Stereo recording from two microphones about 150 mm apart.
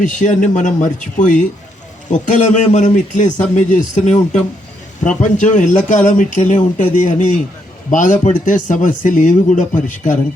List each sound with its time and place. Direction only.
0.0 s a man's voice: 55° left (ahead or behind)